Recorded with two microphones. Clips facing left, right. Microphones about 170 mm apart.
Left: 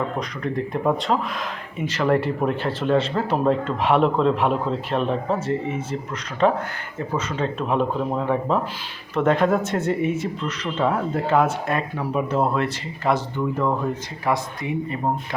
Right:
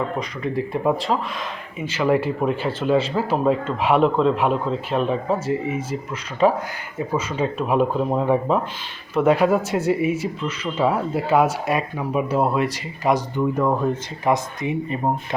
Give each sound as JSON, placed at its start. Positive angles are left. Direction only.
{"t": 0.2, "sound": "speech", "side_deg": -5}